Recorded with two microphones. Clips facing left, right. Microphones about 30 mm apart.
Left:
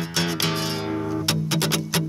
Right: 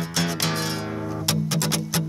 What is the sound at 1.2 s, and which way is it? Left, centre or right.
Music, left.